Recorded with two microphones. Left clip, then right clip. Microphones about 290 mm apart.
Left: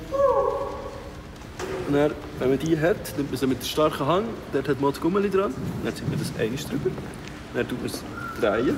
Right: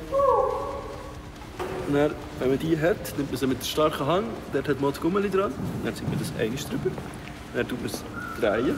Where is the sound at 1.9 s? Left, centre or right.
Centre.